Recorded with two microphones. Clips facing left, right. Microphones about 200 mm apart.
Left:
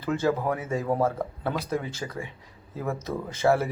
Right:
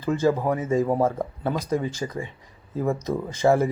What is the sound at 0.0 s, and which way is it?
Speech, 15° right (ahead or behind).